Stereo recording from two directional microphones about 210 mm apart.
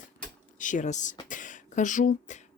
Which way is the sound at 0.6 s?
35° left (ahead or behind).